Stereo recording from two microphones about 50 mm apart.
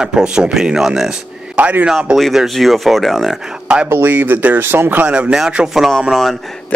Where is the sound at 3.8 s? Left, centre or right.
Right.